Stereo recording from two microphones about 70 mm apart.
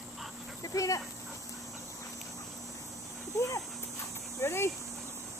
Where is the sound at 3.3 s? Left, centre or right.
Left.